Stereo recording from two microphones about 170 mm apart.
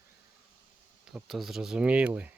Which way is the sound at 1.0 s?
Centre (ahead or behind).